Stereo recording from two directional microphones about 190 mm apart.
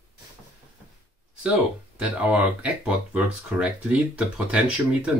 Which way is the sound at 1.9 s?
5° right (ahead or behind).